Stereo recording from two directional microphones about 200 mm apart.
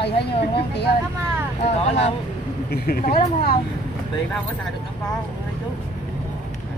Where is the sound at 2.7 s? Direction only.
45° left (ahead or behind).